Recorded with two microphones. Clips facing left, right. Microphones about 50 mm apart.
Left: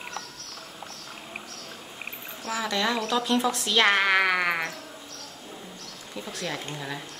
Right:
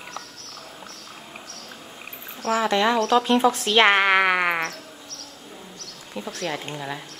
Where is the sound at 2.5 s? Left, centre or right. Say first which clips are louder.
Right 7 dB; right.